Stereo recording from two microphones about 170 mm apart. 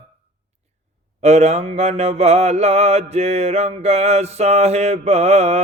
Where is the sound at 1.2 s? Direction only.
40° right (ahead or behind).